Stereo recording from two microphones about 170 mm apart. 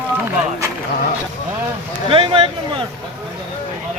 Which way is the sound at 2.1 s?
30° right (ahead or behind).